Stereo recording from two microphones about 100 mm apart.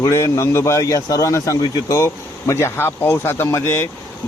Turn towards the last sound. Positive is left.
turn(degrees=25)  # may be behind; listen again after turning